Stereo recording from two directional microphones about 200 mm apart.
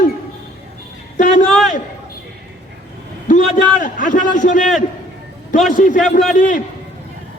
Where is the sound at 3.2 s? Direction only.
40° left (ahead or behind).